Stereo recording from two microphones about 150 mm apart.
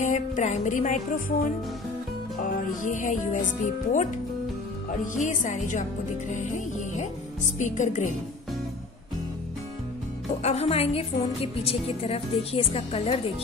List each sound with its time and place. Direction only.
0.0 s music: 55° left (ahead or behind)
7.5 s a woman's voice: 55° left (ahead or behind)
10.4 s a woman's voice: 45° left (ahead or behind)